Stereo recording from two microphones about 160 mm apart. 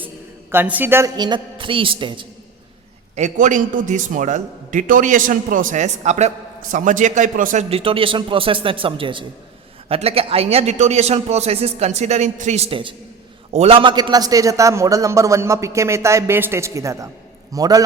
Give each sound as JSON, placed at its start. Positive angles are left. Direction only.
{"t": 0.5, "sound": "a man's voice", "side_deg": -10}
{"t": 1.1, "sound": "a man's voice", "side_deg": -25}
{"t": 3.2, "sound": "a man's voice", "side_deg": -50}